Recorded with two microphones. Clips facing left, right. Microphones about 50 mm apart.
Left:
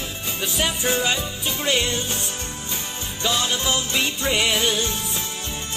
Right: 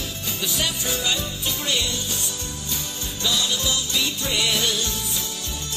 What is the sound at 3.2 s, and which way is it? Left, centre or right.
Music, left.